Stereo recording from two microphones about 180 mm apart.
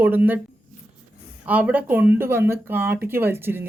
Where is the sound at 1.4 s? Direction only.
10° right (ahead or behind).